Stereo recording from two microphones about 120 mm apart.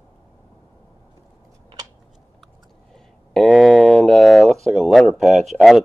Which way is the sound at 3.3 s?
Centre (ahead or behind).